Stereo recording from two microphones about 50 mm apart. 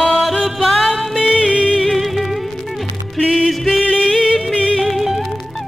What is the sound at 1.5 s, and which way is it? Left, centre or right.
Music, left.